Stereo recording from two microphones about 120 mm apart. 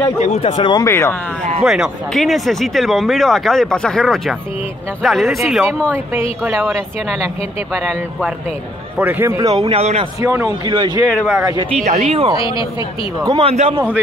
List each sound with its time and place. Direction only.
0.2 s speech: 70° left (ahead or behind)
0.5 s speech: 40° left (ahead or behind)
0.8 s speech: 25° left (ahead or behind)
1.6 s speech: 5° right (ahead or behind)
8.9 s a man's voice: 15° right (ahead or behind); by 9.7 s 30° right (ahead or behind)
9.7 s speech: 60° right (ahead or behind)
10.2 s a man's voice: 25° right (ahead or behind)
11.1 s speech: 5° left (ahead or behind)
11.3 s a man's voice: 25° right (ahead or behind)
11.7 s speech: 65° right (ahead or behind)
13.4 s speech: 55° right (ahead or behind)